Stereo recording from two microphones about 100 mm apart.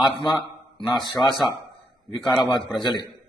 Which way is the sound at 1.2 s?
25° left (ahead or behind).